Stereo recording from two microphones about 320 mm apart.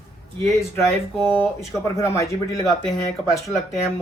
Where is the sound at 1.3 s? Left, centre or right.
Centre.